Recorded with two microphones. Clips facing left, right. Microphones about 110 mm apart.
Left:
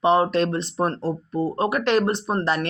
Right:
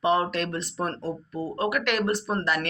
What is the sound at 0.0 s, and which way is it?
Speech, 25° left (ahead or behind).